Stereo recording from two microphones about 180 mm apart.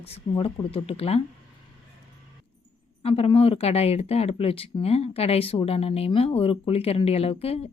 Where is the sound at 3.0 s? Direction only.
30° left (ahead or behind).